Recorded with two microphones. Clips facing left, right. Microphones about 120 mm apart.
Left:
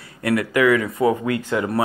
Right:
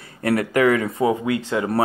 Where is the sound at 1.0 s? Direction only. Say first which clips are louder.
Left 1 dB; 20° right (ahead or behind).